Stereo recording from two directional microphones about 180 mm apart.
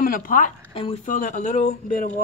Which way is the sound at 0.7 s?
30° left (ahead or behind).